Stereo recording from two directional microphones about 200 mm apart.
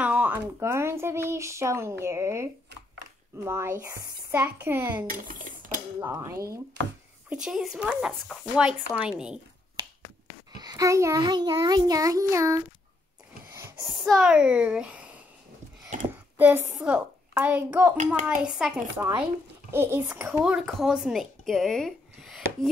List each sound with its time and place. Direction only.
0.0 s speech: 5° right (ahead or behind)
5.1 s speech: 40° right (ahead or behind)
5.9 s speech: 15° right (ahead or behind)
7.2 s speech: 5° right (ahead or behind)
10.6 s speech: 20° right (ahead or behind)
13.6 s a sound: 15° right (ahead or behind)
13.9 s speech: centre (ahead or behind)
15.9 s a sound: 40° right (ahead or behind)
16.3 s a child's voice: 5° right (ahead or behind)